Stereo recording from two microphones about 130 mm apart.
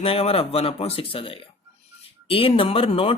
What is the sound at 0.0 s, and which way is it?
Speech, 50° left (ahead or behind).